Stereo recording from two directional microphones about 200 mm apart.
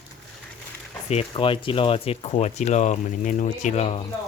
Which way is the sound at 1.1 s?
30° left (ahead or behind).